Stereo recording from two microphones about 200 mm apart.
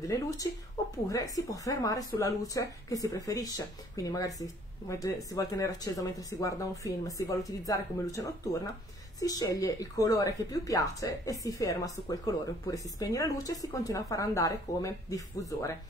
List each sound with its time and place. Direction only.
0.0 s speech: 15° left (ahead or behind)